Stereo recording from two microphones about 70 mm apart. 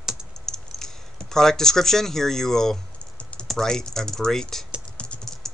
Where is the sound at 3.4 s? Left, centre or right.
Centre.